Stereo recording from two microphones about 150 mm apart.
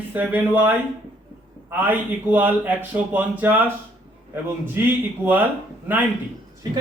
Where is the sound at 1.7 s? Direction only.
15° right (ahead or behind).